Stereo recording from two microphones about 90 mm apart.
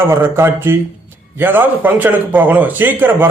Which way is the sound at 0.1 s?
30° right (ahead or behind).